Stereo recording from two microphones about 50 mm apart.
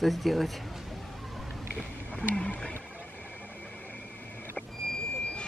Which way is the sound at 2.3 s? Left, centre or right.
Left.